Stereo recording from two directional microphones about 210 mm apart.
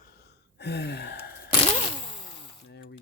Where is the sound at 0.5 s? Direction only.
50° left (ahead or behind).